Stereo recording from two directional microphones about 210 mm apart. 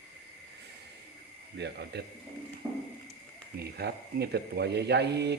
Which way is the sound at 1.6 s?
50° right (ahead or behind).